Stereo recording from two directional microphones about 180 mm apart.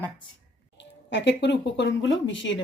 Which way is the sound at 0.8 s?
75° left (ahead or behind).